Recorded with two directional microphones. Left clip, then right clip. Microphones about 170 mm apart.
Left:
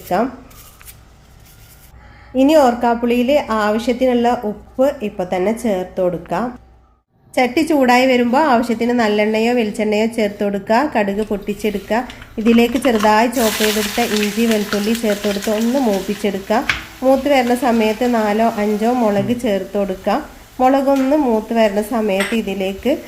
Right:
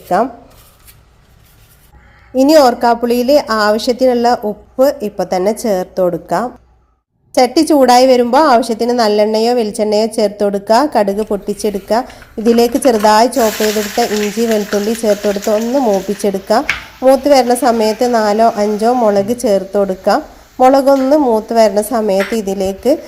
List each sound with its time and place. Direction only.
0.1 s a woman's voice: 40° right (ahead or behind)
2.3 s a woman's voice: 45° right (ahead or behind)